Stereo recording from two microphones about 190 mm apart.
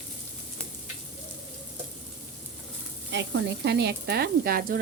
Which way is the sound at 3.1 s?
65° right (ahead or behind).